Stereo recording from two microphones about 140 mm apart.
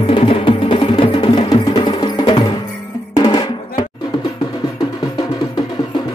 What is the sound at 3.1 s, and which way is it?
Drum, 35° left (ahead or behind).